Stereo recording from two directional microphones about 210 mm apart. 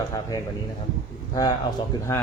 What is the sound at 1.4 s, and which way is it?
Speech, 15° left (ahead or behind).